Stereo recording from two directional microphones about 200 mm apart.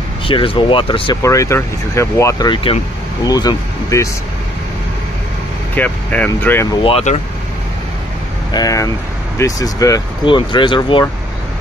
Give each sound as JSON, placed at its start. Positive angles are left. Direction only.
{"t": 0.3, "sound": "speech", "side_deg": 25}
{"t": 5.8, "sound": "speech", "side_deg": 10}
{"t": 6.8, "sound": "speech", "side_deg": 30}
{"t": 8.5, "sound": "speech", "side_deg": 20}